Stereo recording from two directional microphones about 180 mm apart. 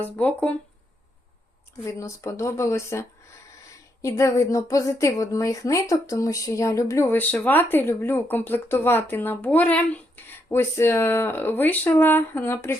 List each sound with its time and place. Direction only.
0.0 s a woman's voice: 5° left (ahead or behind)
1.8 s a woman's voice: 15° left (ahead or behind)